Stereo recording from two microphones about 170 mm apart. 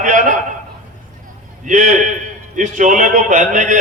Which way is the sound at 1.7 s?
50° right (ahead or behind).